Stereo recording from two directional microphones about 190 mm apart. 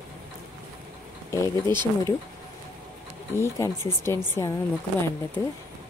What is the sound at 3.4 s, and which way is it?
Speech, 15° left (ahead or behind).